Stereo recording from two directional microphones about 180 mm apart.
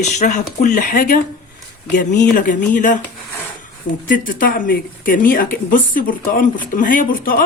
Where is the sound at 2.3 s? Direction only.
50° left (ahead or behind).